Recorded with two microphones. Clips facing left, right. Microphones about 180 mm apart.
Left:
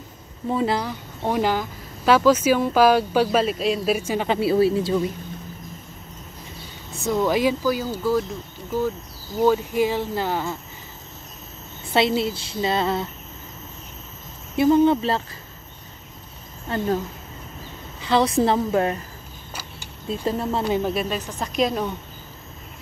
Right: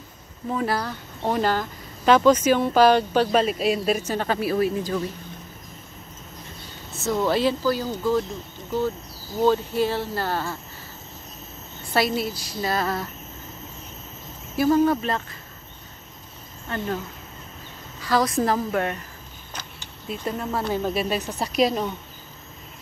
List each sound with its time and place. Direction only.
0.5 s a woman's voice: 25° left (ahead or behind)
0.8 s speech: 10° left (ahead or behind)
4.4 s a woman's voice: 30° left (ahead or behind)
6.9 s speech: 15° left (ahead or behind)
9.4 s speech: 10° left (ahead or behind)
12.2 s a woman's voice: 25° left (ahead or behind)
14.6 s a woman's voice: 25° left (ahead or behind)
16.6 s a woman's voice: 25° left (ahead or behind)
18.0 s a woman's voice: 25° left (ahead or behind)
20.1 s a woman's voice: 30° left (ahead or behind)
20.6 s speech: 15° left (ahead or behind)
20.9 s a woman's voice: 5° right (ahead or behind)